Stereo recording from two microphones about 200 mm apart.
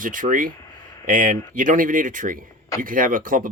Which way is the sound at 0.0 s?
40° right (ahead or behind).